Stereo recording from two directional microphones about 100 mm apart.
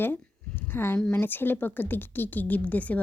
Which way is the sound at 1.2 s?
20° left (ahead or behind).